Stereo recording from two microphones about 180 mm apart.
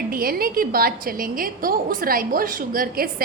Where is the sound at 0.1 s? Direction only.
55° right (ahead or behind).